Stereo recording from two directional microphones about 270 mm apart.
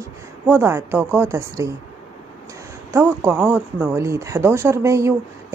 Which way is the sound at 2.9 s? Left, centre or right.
Centre.